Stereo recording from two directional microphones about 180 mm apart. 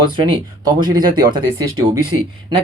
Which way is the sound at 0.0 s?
25° right (ahead or behind).